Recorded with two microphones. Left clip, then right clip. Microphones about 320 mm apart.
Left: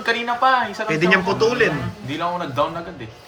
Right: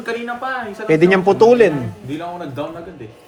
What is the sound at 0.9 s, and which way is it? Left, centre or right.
Speech, centre.